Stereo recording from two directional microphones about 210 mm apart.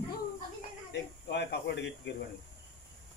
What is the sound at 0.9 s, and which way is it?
Speech, 55° left (ahead or behind).